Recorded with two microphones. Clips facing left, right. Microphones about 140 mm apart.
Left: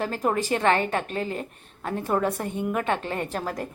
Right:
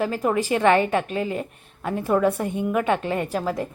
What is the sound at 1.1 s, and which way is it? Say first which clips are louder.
Speech: right 3 dB; 40° left (ahead or behind).